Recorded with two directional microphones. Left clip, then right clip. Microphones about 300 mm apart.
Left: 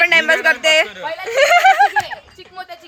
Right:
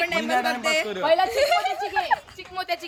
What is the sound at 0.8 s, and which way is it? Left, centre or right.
Speech, right.